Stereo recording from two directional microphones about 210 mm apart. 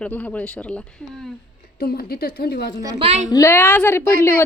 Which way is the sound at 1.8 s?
45° left (ahead or behind).